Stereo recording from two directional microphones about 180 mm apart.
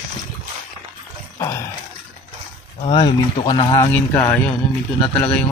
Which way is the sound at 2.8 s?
30° left (ahead or behind).